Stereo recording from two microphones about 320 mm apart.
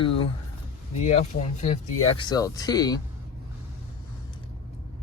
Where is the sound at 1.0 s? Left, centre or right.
Left.